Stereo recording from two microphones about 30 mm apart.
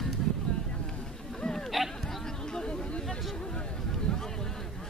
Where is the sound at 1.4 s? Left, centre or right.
Centre.